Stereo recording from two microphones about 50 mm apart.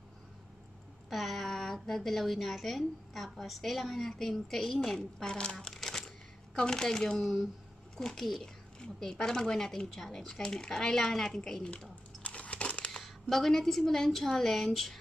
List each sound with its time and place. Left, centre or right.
1.1 s a woman's voice: centre
5.2 s a woman's voice: centre
5.8 s a sound: centre
6.5 s a woman's voice: centre
12.2 s crumpling: left
13.0 s a woman's voice: centre